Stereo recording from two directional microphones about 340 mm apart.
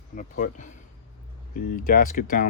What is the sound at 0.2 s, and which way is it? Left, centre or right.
Speech, left.